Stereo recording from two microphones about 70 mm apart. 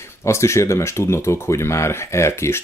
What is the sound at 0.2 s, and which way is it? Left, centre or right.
Speech, left.